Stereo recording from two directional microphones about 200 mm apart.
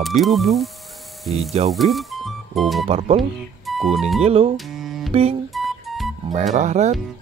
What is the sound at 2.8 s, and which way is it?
Speech, 30° right (ahead or behind).